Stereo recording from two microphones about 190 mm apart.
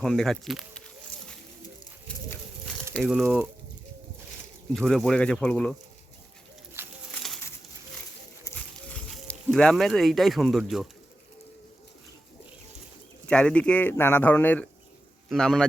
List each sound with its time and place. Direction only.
0.0 s speech: centre (ahead or behind)
2.9 s speech: centre (ahead or behind)
4.7 s speech: centre (ahead or behind)
6.8 s a sound: 10° right (ahead or behind)
8.4 s music: 5° left (ahead or behind)
13.2 s speech: 5° left (ahead or behind)